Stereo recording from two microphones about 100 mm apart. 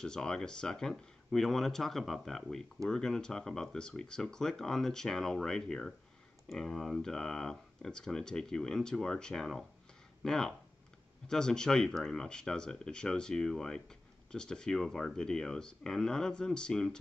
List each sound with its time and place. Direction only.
0.0 s speech: 5° left (ahead or behind)